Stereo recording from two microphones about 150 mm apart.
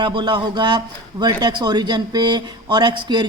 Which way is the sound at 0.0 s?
30° right (ahead or behind).